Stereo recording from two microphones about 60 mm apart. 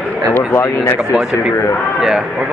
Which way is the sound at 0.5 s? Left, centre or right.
Left.